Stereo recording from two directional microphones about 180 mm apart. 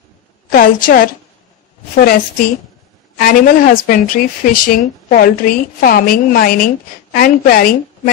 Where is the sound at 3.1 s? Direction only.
55° left (ahead or behind).